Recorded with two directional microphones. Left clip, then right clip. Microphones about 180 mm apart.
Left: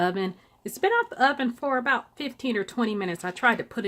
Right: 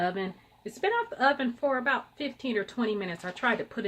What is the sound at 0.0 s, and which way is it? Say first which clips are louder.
Speech: left 4 dB; 55° left (ahead or behind).